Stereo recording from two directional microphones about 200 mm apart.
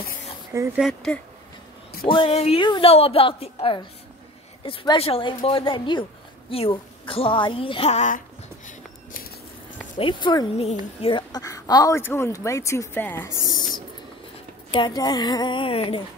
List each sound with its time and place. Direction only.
0.7 s speech: centre (ahead or behind)
2.0 s a woman's voice: 25° left (ahead or behind)
9.9 s a woman's voice: 25° left (ahead or behind)
14.7 s a woman's voice: 20° left (ahead or behind)